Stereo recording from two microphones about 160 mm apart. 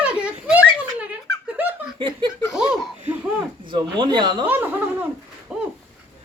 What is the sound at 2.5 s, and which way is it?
Laughter, 5° right (ahead or behind).